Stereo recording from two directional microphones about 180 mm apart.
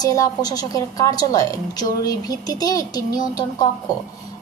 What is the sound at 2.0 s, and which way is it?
A woman's voice, 20° left (ahead or behind).